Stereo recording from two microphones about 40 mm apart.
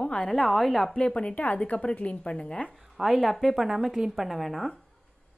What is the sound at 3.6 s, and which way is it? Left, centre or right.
A woman's voice, centre.